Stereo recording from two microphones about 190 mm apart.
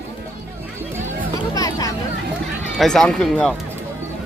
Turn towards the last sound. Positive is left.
turn(degrees=5)  # may be behind; listen again after turning